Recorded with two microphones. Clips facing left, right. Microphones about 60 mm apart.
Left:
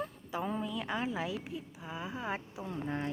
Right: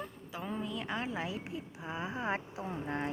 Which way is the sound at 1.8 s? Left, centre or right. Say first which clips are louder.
Right 3 dB; centre.